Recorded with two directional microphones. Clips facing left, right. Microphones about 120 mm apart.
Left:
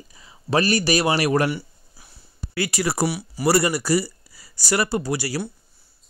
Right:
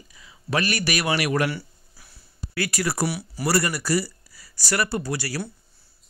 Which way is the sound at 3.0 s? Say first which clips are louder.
Left 3 dB; 5° left (ahead or behind).